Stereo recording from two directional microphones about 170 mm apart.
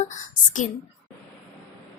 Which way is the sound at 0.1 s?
50° left (ahead or behind).